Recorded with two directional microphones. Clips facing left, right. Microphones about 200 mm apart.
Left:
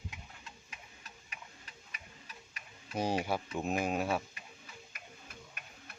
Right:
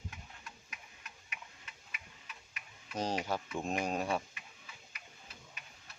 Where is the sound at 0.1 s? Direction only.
25° left (ahead or behind).